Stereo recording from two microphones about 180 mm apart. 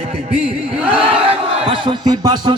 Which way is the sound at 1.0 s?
30° right (ahead or behind).